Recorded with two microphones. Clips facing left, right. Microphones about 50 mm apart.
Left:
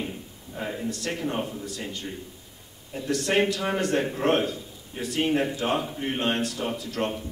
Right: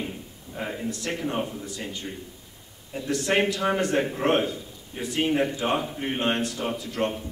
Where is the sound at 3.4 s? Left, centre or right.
Right.